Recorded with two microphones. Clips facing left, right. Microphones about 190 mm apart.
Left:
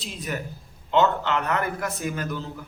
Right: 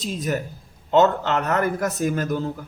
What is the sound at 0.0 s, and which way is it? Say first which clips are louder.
A man's voice: right 6 dB; 45° right (ahead or behind).